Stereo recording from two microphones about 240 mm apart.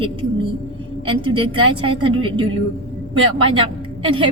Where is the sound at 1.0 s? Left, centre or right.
Right.